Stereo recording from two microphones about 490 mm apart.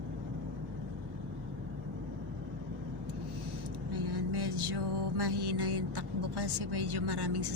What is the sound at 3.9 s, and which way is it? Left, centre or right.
Music, right.